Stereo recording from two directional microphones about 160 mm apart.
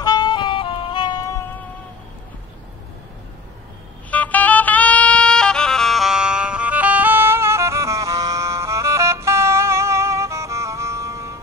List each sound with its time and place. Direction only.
0.0 s saxophone: 25° left (ahead or behind)
4.1 s music: 10° left (ahead or behind); by 11.3 s 20° right (ahead or behind)